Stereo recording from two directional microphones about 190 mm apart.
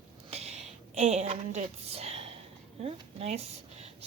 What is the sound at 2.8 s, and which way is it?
Speech, 30° right (ahead or behind).